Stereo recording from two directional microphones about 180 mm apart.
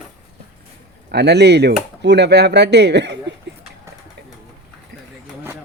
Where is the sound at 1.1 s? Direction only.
65° right (ahead or behind).